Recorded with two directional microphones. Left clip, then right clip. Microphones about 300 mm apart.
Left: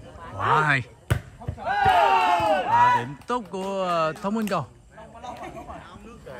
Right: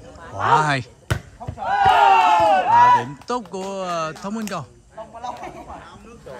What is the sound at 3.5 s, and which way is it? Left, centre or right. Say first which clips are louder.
Speech: even; centre.